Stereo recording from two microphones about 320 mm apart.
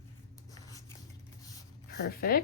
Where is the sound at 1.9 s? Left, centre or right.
Left.